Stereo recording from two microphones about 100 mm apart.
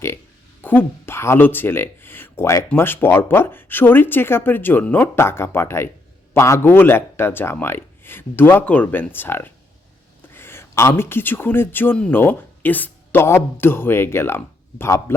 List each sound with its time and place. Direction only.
0.6 s speech: 20° left (ahead or behind)